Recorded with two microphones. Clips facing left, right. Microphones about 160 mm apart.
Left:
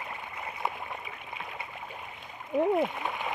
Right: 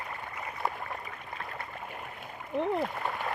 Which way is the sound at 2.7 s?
Centre (ahead or behind).